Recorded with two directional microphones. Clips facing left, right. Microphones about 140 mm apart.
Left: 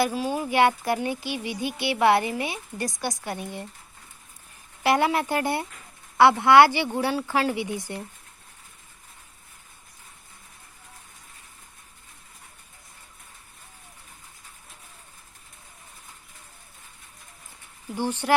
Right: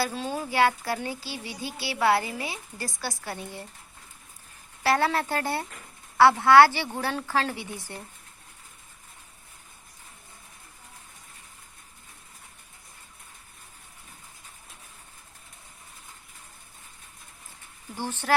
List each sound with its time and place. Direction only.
0.0 s speech: 10° left (ahead or behind)
4.8 s speech: 15° left (ahead or behind)
17.9 s speech: 15° left (ahead or behind)